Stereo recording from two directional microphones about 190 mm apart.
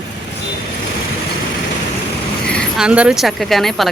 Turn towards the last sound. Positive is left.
turn(degrees=0)  # may be behind; listen again after turning